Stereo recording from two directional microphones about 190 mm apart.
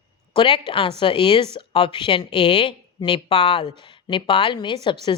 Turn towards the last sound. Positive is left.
turn(degrees=25)  # may be behind; listen again after turning